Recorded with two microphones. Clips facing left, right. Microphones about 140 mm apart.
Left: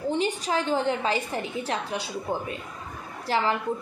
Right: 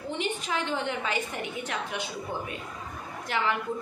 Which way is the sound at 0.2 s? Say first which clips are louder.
Left 4 dB; 35° left (ahead or behind).